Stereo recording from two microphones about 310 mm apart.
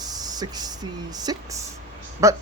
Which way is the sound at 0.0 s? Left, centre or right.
Centre.